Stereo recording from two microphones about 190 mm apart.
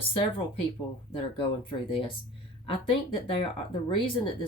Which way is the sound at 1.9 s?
30° left (ahead or behind).